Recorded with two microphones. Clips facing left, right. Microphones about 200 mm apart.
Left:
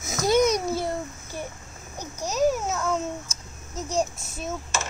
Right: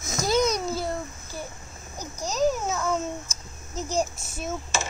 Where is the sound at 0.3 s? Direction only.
15° left (ahead or behind).